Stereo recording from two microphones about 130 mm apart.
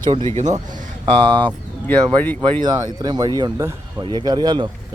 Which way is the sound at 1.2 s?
40° right (ahead or behind).